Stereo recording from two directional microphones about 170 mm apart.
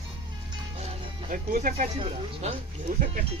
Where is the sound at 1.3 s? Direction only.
50° right (ahead or behind).